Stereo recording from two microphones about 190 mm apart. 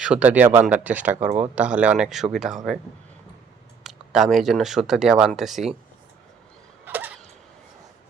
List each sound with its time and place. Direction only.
0.0 s speech: 5° right (ahead or behind)
1.2 s speech: 35° right (ahead or behind)
1.5 s speech: 5° right (ahead or behind)
3.8 s speech: centre (ahead or behind)
6.8 s a sound: 10° right (ahead or behind)